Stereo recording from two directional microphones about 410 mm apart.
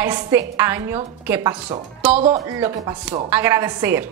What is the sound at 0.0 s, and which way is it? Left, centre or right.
A woman's voice, centre.